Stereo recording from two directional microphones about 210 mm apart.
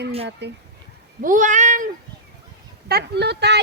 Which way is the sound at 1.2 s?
40° right (ahead or behind).